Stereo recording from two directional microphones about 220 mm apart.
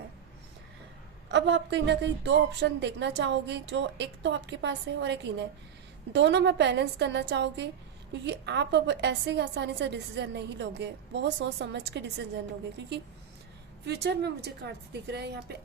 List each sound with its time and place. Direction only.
1.3 s a woman's voice: 55° right (ahead or behind)
13.8 s a woman's voice: 50° right (ahead or behind)